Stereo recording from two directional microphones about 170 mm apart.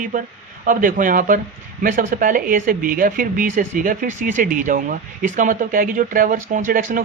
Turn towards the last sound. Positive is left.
turn(degrees=-55)  # may be behind; listen again after turning